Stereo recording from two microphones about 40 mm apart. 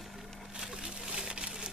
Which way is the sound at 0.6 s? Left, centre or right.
Centre.